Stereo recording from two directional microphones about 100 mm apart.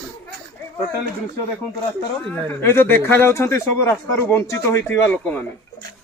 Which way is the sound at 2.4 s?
25° left (ahead or behind).